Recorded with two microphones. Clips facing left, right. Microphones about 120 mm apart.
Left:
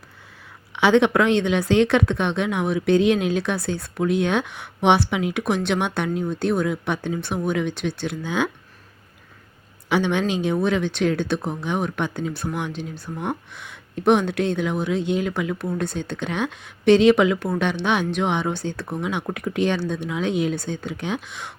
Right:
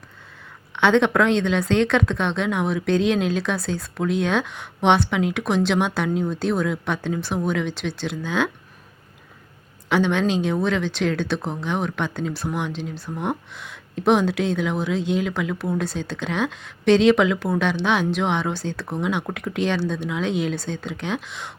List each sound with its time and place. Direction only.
0.8 s speech: 5° left (ahead or behind)
9.9 s speech: 5° left (ahead or behind)